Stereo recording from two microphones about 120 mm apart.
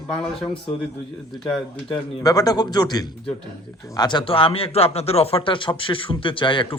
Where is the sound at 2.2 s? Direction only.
30° left (ahead or behind).